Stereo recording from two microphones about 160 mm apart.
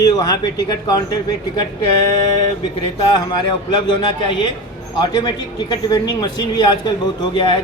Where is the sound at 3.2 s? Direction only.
30° left (ahead or behind).